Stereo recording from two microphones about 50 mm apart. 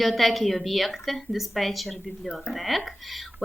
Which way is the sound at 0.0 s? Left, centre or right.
Centre.